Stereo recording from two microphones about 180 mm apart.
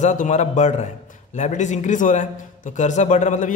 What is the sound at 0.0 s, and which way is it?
A man's voice, 40° left (ahead or behind).